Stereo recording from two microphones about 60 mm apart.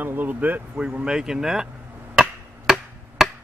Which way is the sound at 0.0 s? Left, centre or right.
Right.